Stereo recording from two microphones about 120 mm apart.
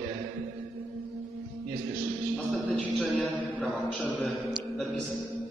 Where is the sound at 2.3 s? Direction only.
5° left (ahead or behind).